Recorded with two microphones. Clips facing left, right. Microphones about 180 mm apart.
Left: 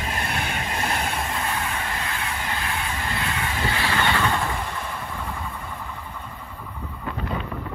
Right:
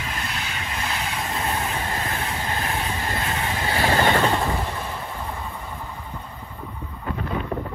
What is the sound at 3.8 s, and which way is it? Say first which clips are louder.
Train: right 6 dB; 40° right (ahead or behind).